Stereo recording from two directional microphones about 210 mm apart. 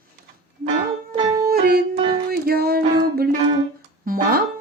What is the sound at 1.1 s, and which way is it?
Music, 20° right (ahead or behind).